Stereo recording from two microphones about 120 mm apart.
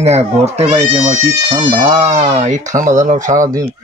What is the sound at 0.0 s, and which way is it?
Speech, 65° right (ahead or behind).